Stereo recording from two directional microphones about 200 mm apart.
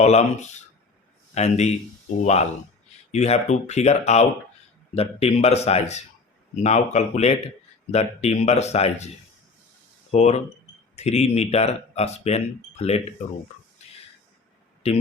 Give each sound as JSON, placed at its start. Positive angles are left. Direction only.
{"t": 0.0, "sound": "speech", "side_deg": 35}
{"t": 10.1, "sound": "speech", "side_deg": 35}
{"t": 14.8, "sound": "speech", "side_deg": 30}